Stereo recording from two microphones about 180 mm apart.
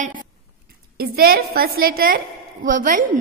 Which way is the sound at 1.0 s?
60° right (ahead or behind).